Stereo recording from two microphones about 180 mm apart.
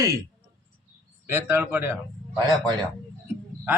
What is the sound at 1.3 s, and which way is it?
Speech, 15° right (ahead or behind).